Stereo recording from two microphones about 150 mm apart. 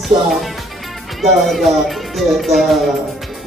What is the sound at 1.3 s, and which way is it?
Speech, centre (ahead or behind).